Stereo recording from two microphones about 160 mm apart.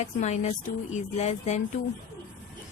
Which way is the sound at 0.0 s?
45° left (ahead or behind).